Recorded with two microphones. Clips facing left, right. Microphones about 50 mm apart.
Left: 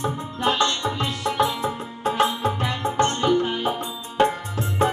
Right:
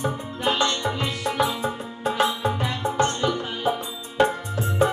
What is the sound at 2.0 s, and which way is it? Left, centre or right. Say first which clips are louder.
Music: left 1 dB; left.